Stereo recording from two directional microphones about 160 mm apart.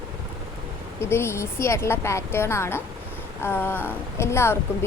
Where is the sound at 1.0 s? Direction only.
15° left (ahead or behind).